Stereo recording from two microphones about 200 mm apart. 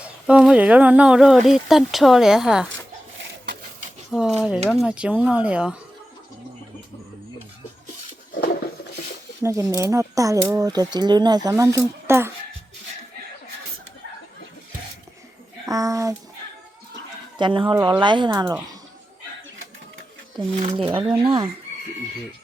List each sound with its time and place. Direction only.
0.0 s speech: 5° right (ahead or behind)
4.1 s speech: centre (ahead or behind)
9.4 s speech: 15° right (ahead or behind)
15.7 s a sound: 15° right (ahead or behind)
17.3 s speech: 25° right (ahead or behind)
20.6 s speech: 30° right (ahead or behind)
20.9 s speech: 10° right (ahead or behind)
21.2 s speech: 30° right (ahead or behind)